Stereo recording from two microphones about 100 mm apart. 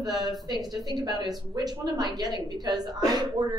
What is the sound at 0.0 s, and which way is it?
A woman's voice, 40° right (ahead or behind).